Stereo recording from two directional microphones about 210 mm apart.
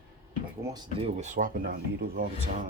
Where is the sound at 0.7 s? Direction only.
15° right (ahead or behind).